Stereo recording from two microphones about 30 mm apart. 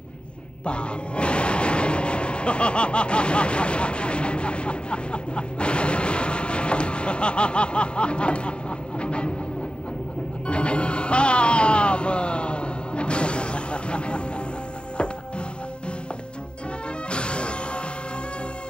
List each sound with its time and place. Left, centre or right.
0.7 s speech: left
10.4 s music: left
17.1 s music: left